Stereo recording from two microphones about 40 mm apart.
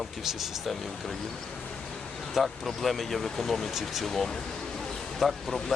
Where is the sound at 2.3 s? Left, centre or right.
Centre.